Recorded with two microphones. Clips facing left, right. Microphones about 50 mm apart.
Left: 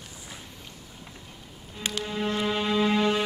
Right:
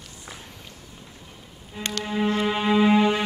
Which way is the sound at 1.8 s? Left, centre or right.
Centre.